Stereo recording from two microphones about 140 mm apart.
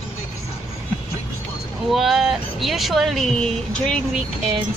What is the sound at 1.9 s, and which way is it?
Speech, centre (ahead or behind).